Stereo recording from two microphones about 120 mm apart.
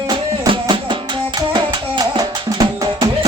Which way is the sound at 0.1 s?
45° right (ahead or behind).